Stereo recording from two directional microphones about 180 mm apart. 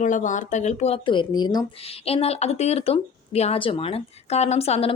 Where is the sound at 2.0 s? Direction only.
35° left (ahead or behind).